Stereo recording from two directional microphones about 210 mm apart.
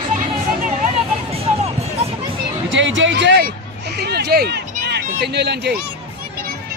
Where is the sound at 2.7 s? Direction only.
65° right (ahead or behind).